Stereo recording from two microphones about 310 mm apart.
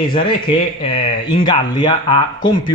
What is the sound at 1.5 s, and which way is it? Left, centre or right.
Speech, centre.